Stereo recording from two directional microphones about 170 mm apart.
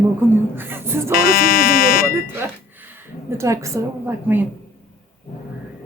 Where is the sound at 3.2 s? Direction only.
15° right (ahead or behind).